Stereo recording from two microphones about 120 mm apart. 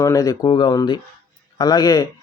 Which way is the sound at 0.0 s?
30° left (ahead or behind).